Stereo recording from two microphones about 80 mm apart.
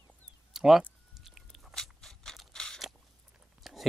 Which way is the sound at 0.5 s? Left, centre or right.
Centre.